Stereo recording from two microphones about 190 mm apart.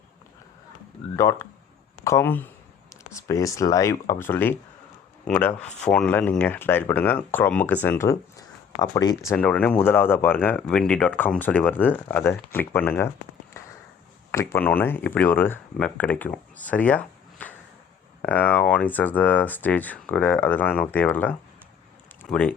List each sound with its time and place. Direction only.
1.1 s speech: 15° left (ahead or behind)